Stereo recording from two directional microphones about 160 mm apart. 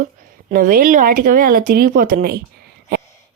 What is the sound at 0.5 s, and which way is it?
Speech, 60° right (ahead or behind).